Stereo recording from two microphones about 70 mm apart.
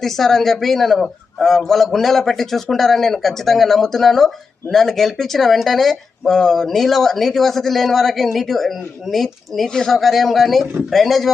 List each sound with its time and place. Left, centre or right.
0.0 s speech: centre